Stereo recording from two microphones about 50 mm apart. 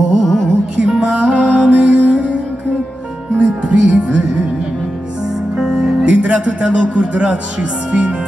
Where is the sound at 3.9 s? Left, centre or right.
Centre.